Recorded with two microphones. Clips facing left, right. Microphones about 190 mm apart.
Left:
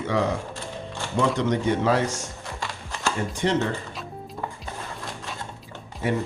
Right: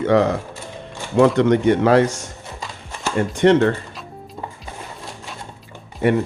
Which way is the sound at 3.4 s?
65° right (ahead or behind).